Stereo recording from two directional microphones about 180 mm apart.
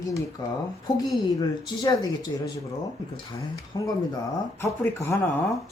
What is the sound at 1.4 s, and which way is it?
Speech, 20° left (ahead or behind).